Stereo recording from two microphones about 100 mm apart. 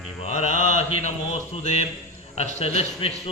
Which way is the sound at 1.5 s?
90° left.